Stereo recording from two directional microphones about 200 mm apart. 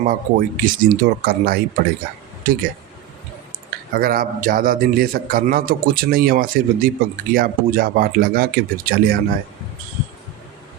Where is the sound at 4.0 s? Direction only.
45° right (ahead or behind).